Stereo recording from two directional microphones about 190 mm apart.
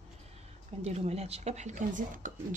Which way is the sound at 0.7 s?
35° right (ahead or behind).